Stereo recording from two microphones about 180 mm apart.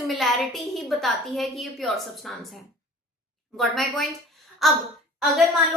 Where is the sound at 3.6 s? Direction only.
Centre (ahead or behind).